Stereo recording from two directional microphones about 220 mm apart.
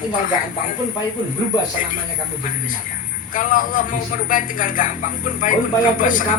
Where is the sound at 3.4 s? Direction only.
40° left (ahead or behind).